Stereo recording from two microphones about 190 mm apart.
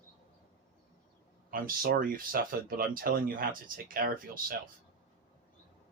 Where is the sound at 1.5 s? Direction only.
50° right (ahead or behind).